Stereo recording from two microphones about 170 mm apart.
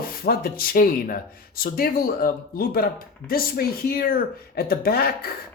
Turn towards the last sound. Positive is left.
turn(degrees=60)  # may be behind; listen again after turning